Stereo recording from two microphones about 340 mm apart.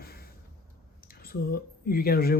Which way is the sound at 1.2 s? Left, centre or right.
Left.